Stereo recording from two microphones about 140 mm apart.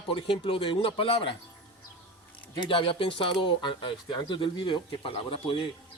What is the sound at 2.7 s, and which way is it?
Speech, 40° left (ahead or behind).